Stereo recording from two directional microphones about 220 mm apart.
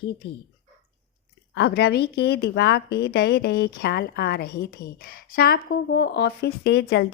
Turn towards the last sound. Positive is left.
turn(degrees=50)  # may be behind; listen again after turning